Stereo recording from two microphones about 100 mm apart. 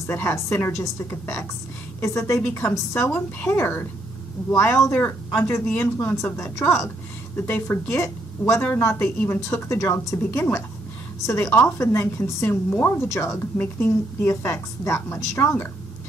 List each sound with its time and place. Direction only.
0.0 s a woman's voice: 25° left (ahead or behind)
13.1 s a woman's voice: 30° left (ahead or behind)